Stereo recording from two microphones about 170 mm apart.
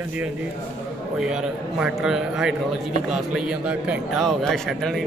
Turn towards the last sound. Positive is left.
turn(degrees=0)  # may be behind; listen again after turning